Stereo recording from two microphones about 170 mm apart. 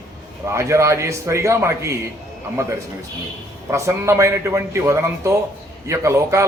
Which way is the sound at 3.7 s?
15° right (ahead or behind).